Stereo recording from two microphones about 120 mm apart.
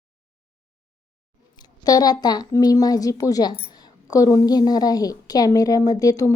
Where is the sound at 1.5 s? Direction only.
35° left (ahead or behind).